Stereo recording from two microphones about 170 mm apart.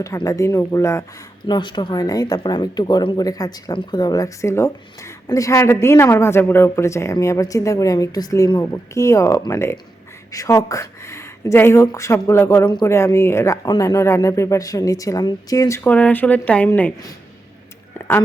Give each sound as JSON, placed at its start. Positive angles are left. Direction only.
{"t": 0.0, "sound": "speech", "side_deg": 20}